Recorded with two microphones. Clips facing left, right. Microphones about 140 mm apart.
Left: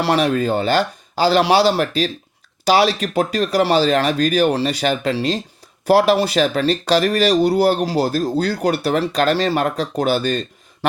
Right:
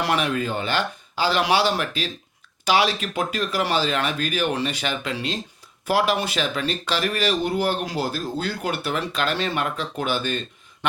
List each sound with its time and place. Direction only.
0.0 s speech: 35° left (ahead or behind)